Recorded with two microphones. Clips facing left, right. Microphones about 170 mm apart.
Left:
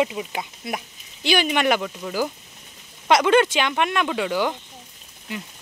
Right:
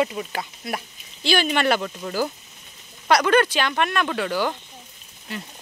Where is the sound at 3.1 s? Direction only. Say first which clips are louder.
Left 1 dB; 20° left (ahead or behind).